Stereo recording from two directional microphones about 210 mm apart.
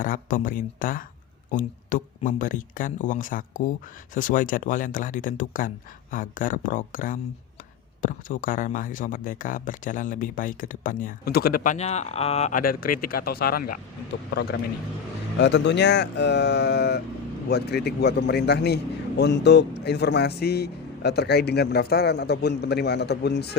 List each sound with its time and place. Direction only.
0.0 s a man's voice: 40° left (ahead or behind)